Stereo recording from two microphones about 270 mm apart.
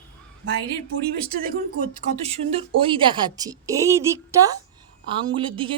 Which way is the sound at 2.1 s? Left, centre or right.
Right.